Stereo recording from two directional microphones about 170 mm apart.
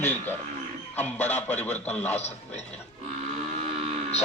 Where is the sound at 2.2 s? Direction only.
40° left (ahead or behind).